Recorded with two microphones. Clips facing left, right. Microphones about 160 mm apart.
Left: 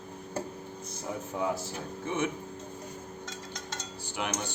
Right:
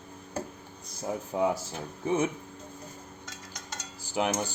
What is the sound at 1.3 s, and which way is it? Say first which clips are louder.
Speech: right 5 dB; 25° right (ahead or behind).